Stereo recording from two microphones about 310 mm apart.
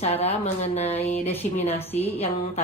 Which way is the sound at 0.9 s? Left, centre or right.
Centre.